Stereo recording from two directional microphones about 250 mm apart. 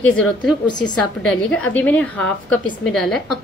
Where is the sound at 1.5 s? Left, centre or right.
Centre.